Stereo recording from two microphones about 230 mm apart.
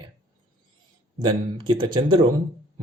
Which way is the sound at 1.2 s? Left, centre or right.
Centre.